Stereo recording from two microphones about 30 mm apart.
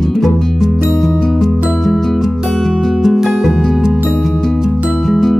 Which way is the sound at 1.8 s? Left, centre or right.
Centre.